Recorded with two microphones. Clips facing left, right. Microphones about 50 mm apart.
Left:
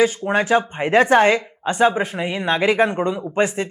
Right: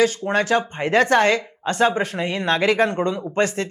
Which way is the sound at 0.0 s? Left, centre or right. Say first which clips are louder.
Left 1 dB; centre.